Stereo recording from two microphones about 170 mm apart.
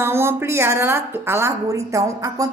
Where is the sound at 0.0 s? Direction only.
15° right (ahead or behind).